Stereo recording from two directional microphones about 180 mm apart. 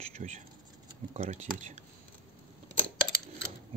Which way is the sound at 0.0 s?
40° right (ahead or behind).